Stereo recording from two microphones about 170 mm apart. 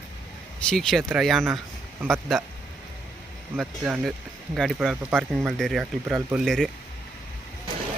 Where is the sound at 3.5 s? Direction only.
Centre (ahead or behind).